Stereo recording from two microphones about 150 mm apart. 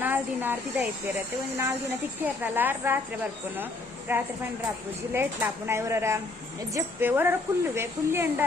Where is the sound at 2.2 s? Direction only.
10° right (ahead or behind).